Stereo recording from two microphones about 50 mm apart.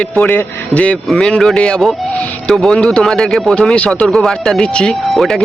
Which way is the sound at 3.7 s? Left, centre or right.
Left.